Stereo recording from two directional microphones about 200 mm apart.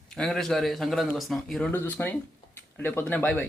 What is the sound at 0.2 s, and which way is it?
Speech, centre (ahead or behind).